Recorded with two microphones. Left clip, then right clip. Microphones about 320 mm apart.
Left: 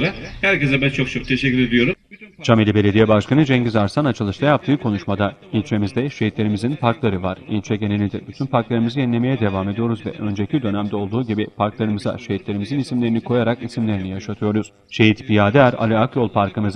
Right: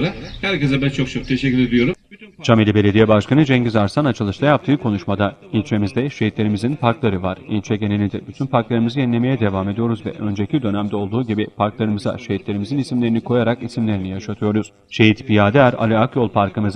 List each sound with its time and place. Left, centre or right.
0.8 s speech: centre
2.4 s speech: centre